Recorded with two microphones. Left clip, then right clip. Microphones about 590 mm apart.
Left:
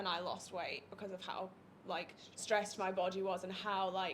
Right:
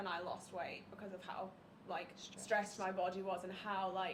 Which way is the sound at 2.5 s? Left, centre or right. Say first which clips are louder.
Left 2 dB; left.